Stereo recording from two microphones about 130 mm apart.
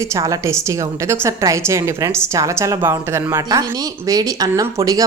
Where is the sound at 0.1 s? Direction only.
25° right (ahead or behind).